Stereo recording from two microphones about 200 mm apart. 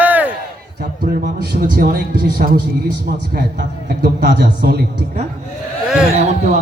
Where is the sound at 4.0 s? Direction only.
55° right (ahead or behind).